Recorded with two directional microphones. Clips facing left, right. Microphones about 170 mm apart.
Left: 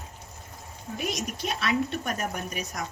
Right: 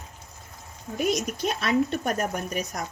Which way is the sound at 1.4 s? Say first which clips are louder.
Right 3 dB; 40° right (ahead or behind).